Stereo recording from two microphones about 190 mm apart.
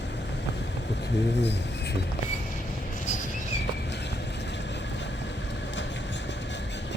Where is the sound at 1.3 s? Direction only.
65° left (ahead or behind).